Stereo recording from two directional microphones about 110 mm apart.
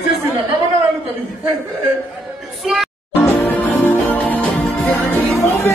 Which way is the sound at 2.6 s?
Centre (ahead or behind).